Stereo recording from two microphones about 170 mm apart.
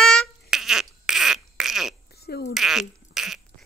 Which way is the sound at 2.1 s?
70° left (ahead or behind).